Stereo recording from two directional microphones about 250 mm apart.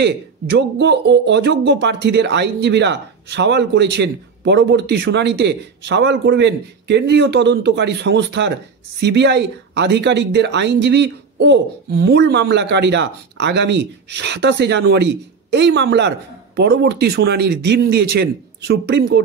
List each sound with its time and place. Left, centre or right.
0.0 s speech: right